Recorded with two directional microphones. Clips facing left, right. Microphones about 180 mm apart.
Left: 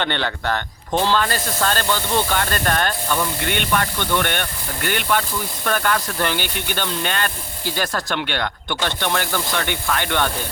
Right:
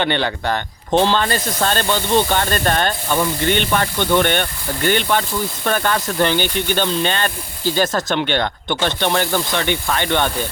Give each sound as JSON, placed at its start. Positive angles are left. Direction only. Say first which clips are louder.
{"t": 0.0, "sound": "speech", "louder": "right 4 dB", "side_deg": -15}